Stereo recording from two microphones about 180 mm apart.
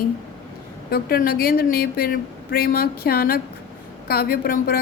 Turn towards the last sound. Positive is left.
turn(degrees=55)  # may be behind; listen again after turning